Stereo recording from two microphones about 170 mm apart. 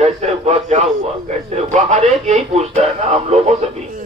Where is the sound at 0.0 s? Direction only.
40° right (ahead or behind).